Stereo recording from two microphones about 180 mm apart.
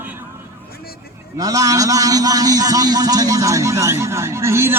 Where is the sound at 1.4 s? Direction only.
20° right (ahead or behind).